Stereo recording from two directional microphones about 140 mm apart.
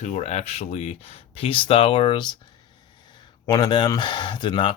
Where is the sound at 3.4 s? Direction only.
30° left (ahead or behind).